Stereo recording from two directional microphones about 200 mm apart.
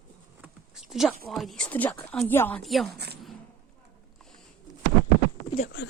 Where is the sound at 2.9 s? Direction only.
55° right (ahead or behind).